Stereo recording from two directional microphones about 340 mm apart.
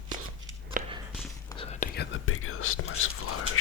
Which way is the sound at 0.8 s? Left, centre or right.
Right.